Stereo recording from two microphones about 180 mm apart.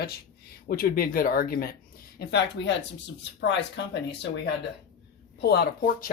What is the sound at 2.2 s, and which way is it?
Speech, 70° left (ahead or behind).